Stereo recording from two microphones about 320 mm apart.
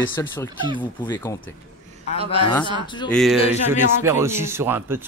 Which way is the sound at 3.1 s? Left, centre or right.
Centre.